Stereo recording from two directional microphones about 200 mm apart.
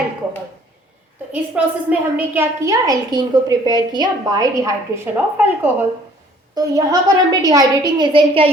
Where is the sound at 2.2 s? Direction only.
15° right (ahead or behind).